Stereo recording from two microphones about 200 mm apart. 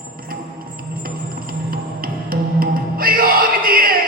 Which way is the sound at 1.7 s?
45° right (ahead or behind).